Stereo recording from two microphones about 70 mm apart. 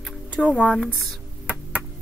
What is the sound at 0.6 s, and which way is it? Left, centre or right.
Speech, centre.